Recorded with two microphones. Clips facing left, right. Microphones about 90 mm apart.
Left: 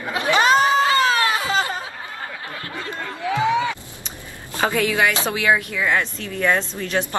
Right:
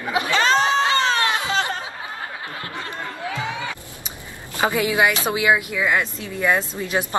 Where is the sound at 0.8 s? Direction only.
30° right (ahead or behind).